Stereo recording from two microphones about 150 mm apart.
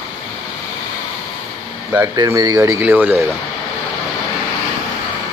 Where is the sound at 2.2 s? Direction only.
25° right (ahead or behind).